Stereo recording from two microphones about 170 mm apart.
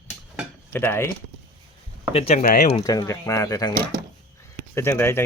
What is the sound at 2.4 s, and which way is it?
Speech, 60° left (ahead or behind).